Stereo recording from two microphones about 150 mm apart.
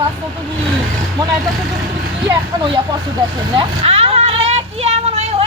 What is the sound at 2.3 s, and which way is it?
Speech, 30° right (ahead or behind).